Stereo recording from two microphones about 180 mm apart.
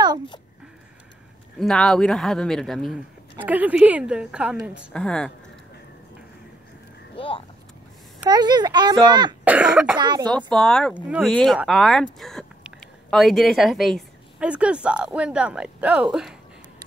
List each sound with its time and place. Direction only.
1.6 s speech: 5° left (ahead or behind)
3.3 s a woman's voice: 10° right (ahead or behind)
4.9 s speech: 5° left (ahead or behind)
7.2 s vehicle: 30° left (ahead or behind)
8.3 s a child's voice: 25° right (ahead or behind)
9.4 s cough: 5° right (ahead or behind)
9.9 s a child's voice: 25° right (ahead or behind)
10.2 s speech: 5° left (ahead or behind)